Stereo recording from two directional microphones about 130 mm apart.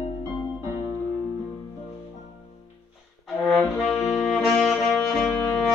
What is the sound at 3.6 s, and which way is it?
Saxophone, centre (ahead or behind).